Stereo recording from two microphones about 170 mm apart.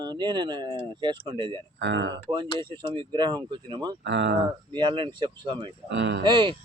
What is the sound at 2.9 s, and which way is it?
A man's voice, 30° right (ahead or behind).